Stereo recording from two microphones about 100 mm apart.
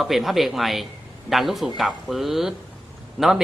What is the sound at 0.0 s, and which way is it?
Speech, centre (ahead or behind).